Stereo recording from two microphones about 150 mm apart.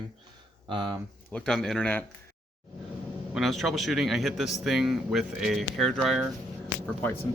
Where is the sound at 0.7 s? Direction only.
30° right (ahead or behind).